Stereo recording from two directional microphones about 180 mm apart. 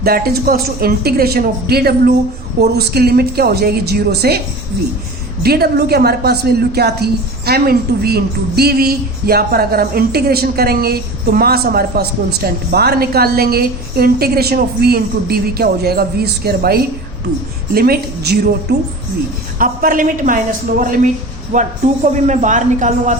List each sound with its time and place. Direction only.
0.0 s a woman's voice: 55° right (ahead or behind)
5.4 s a woman's voice: 60° right (ahead or behind)
19.5 s a woman's voice: 50° right (ahead or behind)